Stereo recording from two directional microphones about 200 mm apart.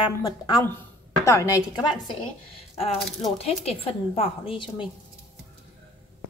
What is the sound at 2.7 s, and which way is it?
A woman's voice, 30° left (ahead or behind).